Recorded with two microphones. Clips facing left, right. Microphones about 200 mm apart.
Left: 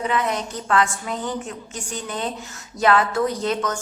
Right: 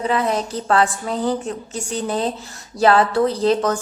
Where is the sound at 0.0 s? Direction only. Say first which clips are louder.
Right 3 dB; 35° right (ahead or behind).